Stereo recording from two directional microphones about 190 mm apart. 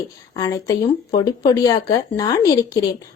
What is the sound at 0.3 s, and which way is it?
A woman's voice, 20° left (ahead or behind).